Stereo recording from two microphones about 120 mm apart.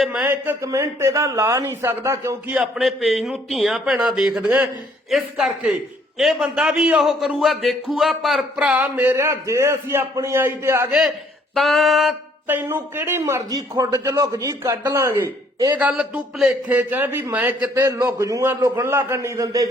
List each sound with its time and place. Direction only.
0.0 s a man's voice: 5° right (ahead or behind)
0.3 s speech: 25° right (ahead or behind)
2.6 s a man's voice: centre (ahead or behind); by 10.8 s 20° right (ahead or behind)
11.5 s a man's voice: centre (ahead or behind)
12.5 s speech: 20° right (ahead or behind)
13.5 s speech: 30° right (ahead or behind)
15.7 s a man's voice: 10° right (ahead or behind)
18.0 s speech: 25° right (ahead or behind)